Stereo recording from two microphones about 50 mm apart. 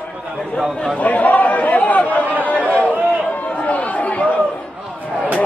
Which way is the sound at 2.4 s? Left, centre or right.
Left.